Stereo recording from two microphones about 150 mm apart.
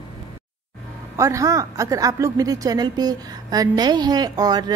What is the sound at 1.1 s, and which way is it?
Speech, 20° right (ahead or behind).